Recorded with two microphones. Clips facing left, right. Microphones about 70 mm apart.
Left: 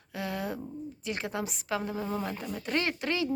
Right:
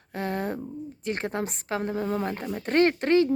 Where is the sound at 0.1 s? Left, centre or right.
Right.